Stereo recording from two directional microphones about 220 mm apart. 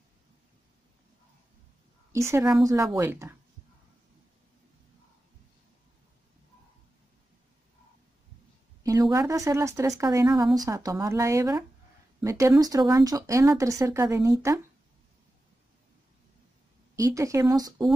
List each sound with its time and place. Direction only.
2.1 s speech: 10° right (ahead or behind)
8.8 s speech: 15° right (ahead or behind)
16.9 s speech: 15° right (ahead or behind)